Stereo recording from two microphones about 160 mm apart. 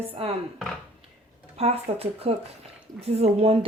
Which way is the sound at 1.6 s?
40° right (ahead or behind).